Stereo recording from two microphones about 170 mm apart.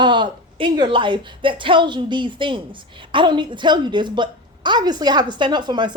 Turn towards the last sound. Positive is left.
turn(degrees=-25)  # may be behind; listen again after turning